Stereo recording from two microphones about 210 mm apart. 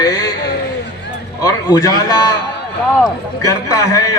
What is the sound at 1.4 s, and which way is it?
Speech, 15° left (ahead or behind).